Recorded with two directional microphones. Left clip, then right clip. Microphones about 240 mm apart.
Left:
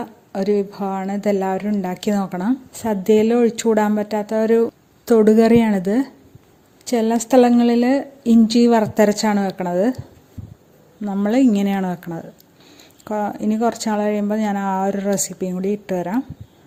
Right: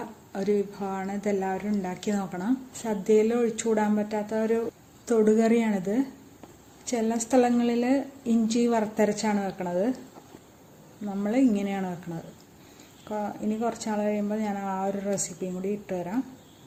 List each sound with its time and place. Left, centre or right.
0.3 s speech: left
11.0 s speech: left